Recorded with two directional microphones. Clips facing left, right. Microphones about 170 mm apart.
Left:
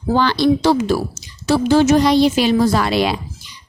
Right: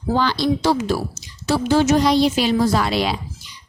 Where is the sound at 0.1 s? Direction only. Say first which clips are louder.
Left 4 dB; 70° left (ahead or behind).